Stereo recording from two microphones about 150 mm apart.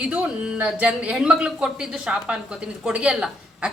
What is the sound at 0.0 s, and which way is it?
A woman's voice, 10° right (ahead or behind).